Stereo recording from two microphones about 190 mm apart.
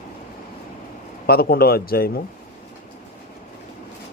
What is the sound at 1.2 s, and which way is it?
Speech, 55° left (ahead or behind).